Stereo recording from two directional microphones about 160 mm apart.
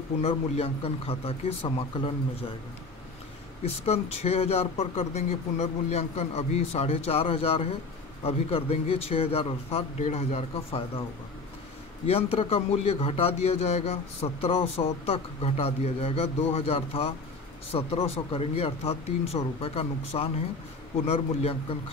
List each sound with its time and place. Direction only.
0.2 s speech: 40° left (ahead or behind)
3.6 s speech: 40° left (ahead or behind)
12.1 s speech: 35° left (ahead or behind)